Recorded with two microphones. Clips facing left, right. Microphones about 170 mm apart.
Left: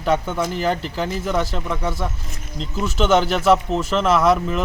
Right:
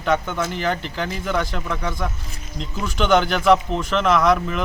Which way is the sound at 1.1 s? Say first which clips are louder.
Left 1 dB; 5° left (ahead or behind).